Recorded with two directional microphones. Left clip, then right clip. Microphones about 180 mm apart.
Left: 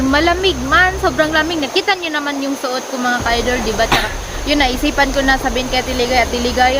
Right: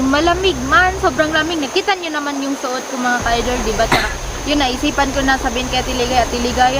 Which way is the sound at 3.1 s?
20° left (ahead or behind).